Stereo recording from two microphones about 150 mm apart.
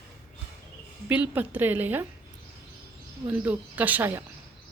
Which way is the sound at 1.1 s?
10° right (ahead or behind).